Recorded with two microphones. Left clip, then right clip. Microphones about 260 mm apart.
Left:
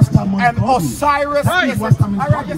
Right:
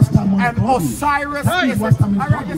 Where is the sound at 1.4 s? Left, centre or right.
Left.